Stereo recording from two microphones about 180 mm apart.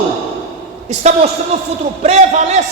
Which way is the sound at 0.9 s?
40° right (ahead or behind).